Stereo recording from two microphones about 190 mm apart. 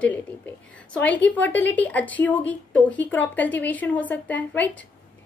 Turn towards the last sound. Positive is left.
turn(degrees=10)  # may be behind; listen again after turning